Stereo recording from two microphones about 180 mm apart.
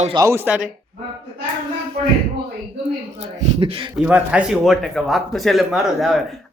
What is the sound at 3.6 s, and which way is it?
Speech, 30° right (ahead or behind).